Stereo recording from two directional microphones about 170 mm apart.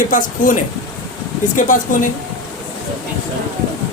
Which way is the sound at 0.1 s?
50° left (ahead or behind).